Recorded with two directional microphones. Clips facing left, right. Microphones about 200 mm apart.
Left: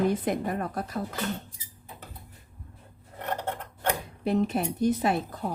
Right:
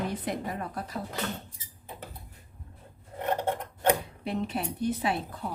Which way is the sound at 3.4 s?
10° right (ahead or behind).